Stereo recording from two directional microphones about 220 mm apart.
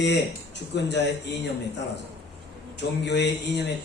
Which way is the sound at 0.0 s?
50° left (ahead or behind).